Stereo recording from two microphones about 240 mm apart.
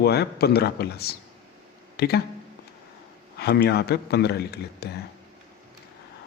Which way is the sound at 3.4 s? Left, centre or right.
Left.